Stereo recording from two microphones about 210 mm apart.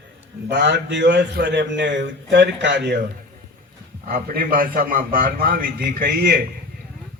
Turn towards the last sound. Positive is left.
turn(degrees=-45)  # may be behind; listen again after turning